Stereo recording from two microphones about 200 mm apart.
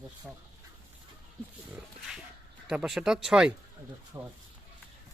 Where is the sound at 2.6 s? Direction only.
5° right (ahead or behind).